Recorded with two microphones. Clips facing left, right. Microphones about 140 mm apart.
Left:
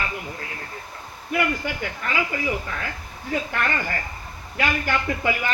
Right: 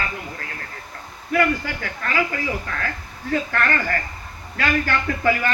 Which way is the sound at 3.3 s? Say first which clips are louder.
Right 3 dB; 20° left (ahead or behind).